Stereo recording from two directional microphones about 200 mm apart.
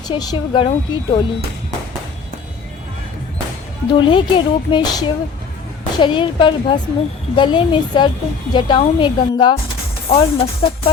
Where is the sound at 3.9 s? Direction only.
25° left (ahead or behind).